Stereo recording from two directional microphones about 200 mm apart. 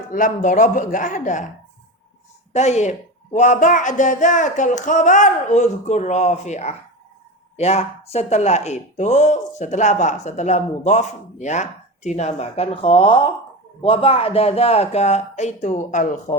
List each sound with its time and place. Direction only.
0.1 s speech: 40° left (ahead or behind)
2.5 s a woman's voice: 35° left (ahead or behind)